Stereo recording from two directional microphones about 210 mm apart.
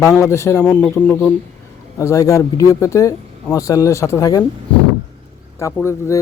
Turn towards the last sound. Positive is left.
turn(degrees=15)  # may be behind; listen again after turning